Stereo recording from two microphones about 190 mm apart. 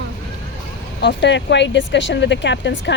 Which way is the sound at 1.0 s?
65° left (ahead or behind).